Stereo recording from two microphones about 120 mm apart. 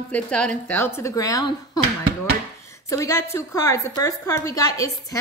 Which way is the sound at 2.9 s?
25° left (ahead or behind).